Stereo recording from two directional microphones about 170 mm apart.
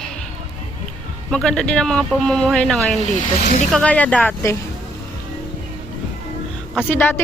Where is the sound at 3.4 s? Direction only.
45° left (ahead or behind).